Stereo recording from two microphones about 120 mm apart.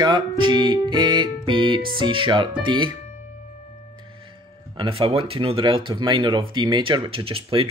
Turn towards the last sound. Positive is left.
turn(degrees=-50)  # may be behind; listen again after turning